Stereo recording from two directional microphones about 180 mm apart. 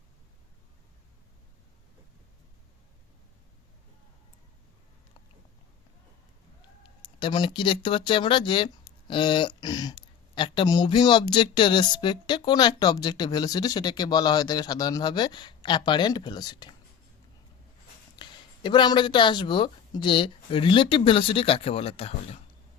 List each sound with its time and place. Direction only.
7.2 s speech: 25° left (ahead or behind)
18.2 s speech: 25° left (ahead or behind)